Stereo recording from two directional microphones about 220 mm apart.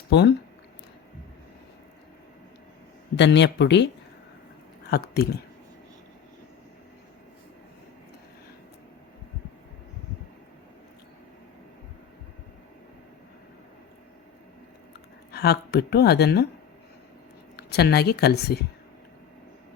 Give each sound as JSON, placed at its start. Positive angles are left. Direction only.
{"t": 0.1, "sound": "speech", "side_deg": 50}
{"t": 3.2, "sound": "speech", "side_deg": 50}
{"t": 4.9, "sound": "speech", "side_deg": 45}
{"t": 15.3, "sound": "speech", "side_deg": 45}
{"t": 17.6, "sound": "speech", "side_deg": 45}